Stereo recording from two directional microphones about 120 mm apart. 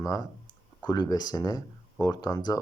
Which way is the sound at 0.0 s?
30° left (ahead or behind).